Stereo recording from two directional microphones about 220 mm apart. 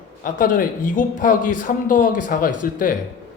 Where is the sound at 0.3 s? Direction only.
40° left (ahead or behind).